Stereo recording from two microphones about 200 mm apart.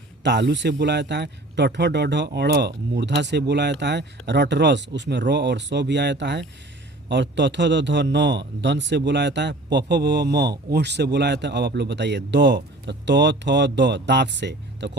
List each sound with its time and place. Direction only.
0.2 s a man's voice: 60° right (ahead or behind)